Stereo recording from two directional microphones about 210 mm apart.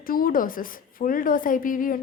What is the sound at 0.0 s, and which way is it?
A woman's voice, 45° left (ahead or behind).